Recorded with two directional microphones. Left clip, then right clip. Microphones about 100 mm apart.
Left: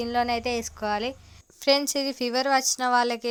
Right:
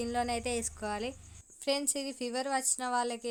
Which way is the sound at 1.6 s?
55° left (ahead or behind).